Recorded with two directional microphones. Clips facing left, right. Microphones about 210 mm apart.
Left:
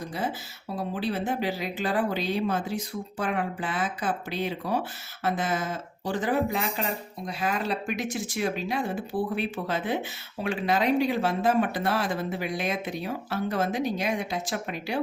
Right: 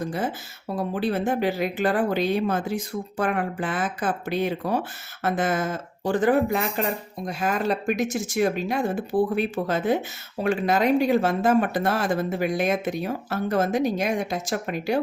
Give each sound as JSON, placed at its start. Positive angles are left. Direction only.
{"t": 0.8, "sound": "speech", "side_deg": -50}